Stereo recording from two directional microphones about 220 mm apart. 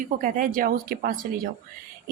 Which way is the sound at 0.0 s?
40° right (ahead or behind).